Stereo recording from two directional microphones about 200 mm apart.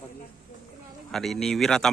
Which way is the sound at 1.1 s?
Centre (ahead or behind).